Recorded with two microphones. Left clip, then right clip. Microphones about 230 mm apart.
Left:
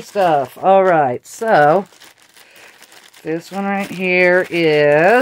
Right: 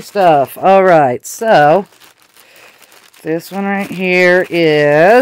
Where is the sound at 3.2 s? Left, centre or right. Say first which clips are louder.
Right 4 dB; right.